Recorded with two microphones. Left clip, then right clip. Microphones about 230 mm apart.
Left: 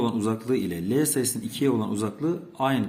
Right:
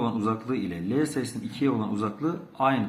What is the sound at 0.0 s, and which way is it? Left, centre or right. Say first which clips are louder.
Speech: left 1 dB; left.